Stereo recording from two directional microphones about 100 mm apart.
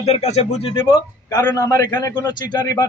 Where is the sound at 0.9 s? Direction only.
40° left (ahead or behind).